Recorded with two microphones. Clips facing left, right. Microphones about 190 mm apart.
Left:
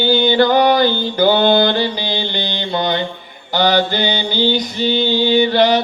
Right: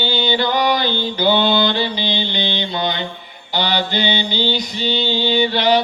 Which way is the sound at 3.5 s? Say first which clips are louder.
Left 5 dB; 45° left (ahead or behind).